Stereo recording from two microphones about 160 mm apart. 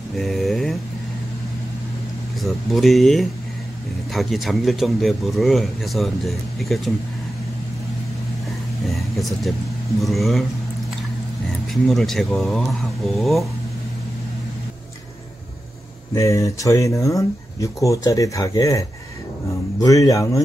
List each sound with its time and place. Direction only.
0.2 s a sound: centre (ahead or behind)
2.4 s speech: centre (ahead or behind)
10.0 s speech: centre (ahead or behind)
11.7 s speech: centre (ahead or behind)
16.2 s speech: 20° left (ahead or behind)